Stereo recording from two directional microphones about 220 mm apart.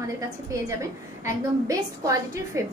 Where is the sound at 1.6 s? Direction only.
15° right (ahead or behind).